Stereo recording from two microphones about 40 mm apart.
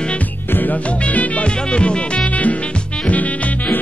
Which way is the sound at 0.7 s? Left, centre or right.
Left.